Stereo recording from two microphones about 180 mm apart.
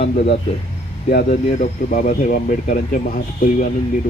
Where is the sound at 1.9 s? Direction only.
45° left (ahead or behind).